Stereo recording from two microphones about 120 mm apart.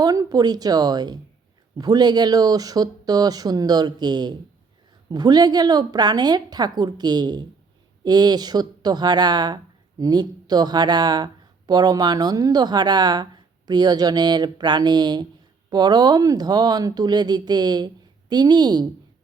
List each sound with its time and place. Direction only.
0.0 s speech: 30° right (ahead or behind)